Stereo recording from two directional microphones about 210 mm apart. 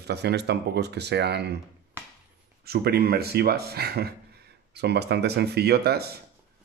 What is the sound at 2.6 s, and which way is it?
Speech, 50° right (ahead or behind).